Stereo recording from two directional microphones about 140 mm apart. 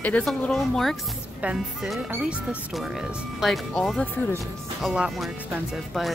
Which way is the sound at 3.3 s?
Centre (ahead or behind).